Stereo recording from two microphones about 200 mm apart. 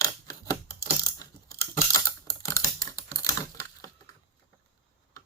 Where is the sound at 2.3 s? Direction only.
15° left (ahead or behind).